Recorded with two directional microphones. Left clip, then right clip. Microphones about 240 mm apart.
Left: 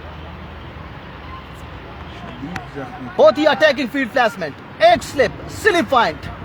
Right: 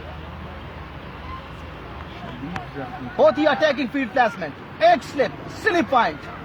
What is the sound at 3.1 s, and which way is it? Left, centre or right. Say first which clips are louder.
Speech: left 4 dB; left.